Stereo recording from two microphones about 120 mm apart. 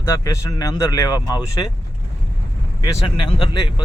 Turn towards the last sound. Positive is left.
turn(degrees=40)  # may be behind; listen again after turning